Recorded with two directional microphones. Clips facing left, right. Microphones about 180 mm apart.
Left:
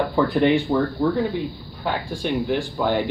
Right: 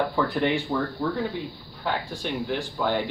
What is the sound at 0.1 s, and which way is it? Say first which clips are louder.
Speech: left 6 dB; 20° left (ahead or behind).